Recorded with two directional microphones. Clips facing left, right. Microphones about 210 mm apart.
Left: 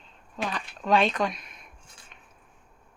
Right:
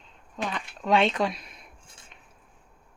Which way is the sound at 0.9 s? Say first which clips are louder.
Right 1 dB; 25° right (ahead or behind).